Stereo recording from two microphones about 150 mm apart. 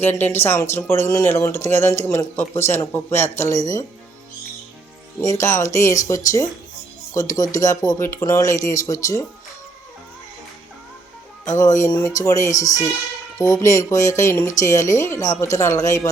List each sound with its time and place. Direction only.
0.0 s speech: 15° left (ahead or behind)
5.2 s speech: 20° left (ahead or behind)
11.4 s speech: 20° left (ahead or behind)